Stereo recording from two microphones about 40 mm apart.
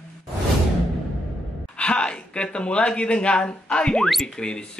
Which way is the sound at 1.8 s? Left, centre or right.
Left.